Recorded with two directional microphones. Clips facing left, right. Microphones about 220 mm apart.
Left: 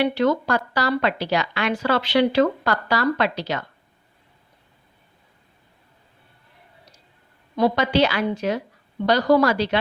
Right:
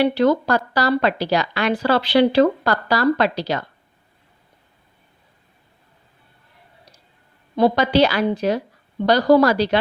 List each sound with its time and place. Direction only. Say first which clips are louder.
0.0 s speech: right 3 dB; 35° right (ahead or behind)
7.5 s speech: right 3 dB; 35° right (ahead or behind)